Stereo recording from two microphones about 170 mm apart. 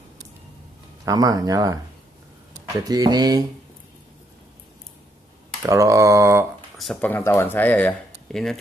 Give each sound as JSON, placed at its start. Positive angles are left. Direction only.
{"t": 1.0, "sound": "speech", "side_deg": -20}
{"t": 5.6, "sound": "speech", "side_deg": -20}
{"t": 6.8, "sound": "speech", "side_deg": 5}